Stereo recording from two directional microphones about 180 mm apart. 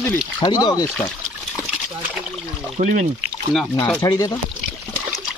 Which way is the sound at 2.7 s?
50° right (ahead or behind).